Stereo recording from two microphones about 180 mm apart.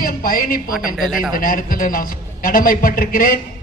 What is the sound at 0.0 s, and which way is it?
Speech, 55° left (ahead or behind).